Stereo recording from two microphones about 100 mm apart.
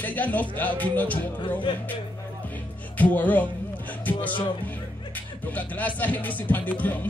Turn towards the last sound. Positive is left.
turn(degrees=15)  # may be behind; listen again after turning